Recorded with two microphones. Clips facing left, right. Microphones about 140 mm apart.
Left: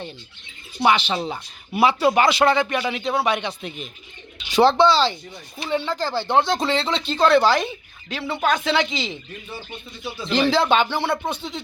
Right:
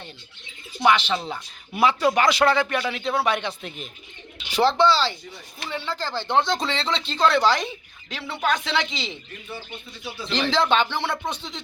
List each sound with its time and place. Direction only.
0.8 s speech: 25° left (ahead or behind)
1.7 s speech: 10° left (ahead or behind)
2.4 s speech: 20° left (ahead or behind)
2.7 s speech: 10° left (ahead or behind)
3.2 s speech: centre (ahead or behind)
4.5 s speech: 15° left (ahead or behind); by 9.1 s centre (ahead or behind)
10.3 s speech: 5° left (ahead or behind)